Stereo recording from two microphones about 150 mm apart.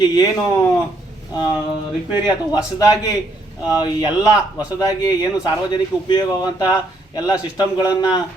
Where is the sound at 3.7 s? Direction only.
25° left (ahead or behind).